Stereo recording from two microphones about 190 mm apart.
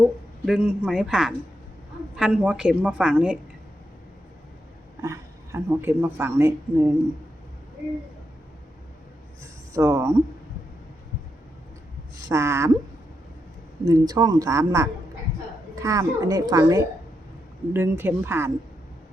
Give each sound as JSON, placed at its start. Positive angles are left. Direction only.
{"t": 0.4, "sound": "a woman's voice", "side_deg": -5}
{"t": 5.0, "sound": "speech", "side_deg": -15}
{"t": 9.4, "sound": "speech", "side_deg": -15}
{"t": 12.3, "sound": "speech", "side_deg": -15}
{"t": 13.8, "sound": "speech", "side_deg": -20}